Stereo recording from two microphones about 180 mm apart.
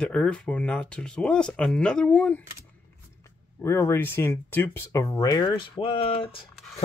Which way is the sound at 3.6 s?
15° left (ahead or behind).